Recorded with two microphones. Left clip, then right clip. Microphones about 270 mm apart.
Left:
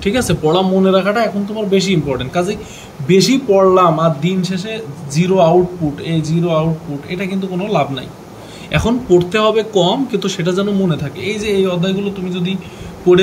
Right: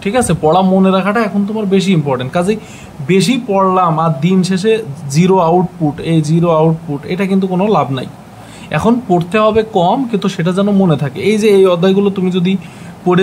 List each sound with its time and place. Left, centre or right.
0.0 s speech: centre